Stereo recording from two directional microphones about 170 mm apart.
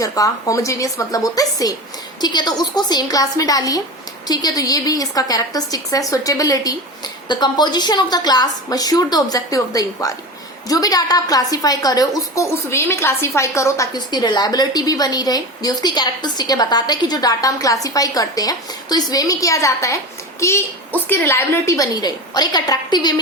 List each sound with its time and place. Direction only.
0.0 s a woman's voice: 20° left (ahead or behind)